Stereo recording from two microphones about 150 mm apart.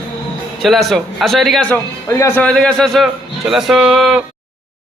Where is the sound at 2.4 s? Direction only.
5° left (ahead or behind).